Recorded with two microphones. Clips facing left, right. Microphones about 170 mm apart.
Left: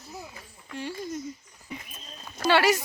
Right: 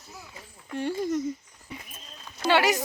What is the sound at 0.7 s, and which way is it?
Speech, 55° right (ahead or behind).